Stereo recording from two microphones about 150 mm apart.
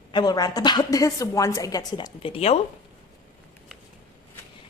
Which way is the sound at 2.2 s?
40° left (ahead or behind).